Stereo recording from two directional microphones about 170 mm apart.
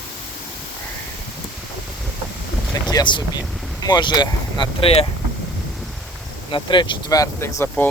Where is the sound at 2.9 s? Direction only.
25° left (ahead or behind).